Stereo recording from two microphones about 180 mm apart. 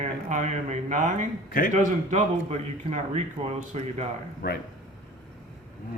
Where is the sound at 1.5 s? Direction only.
55° left (ahead or behind).